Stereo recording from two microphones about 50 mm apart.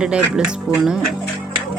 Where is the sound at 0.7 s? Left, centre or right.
Centre.